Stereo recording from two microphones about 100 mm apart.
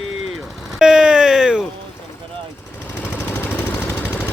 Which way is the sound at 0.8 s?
10° right (ahead or behind).